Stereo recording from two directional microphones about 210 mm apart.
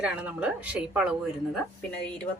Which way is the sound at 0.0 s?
5° right (ahead or behind).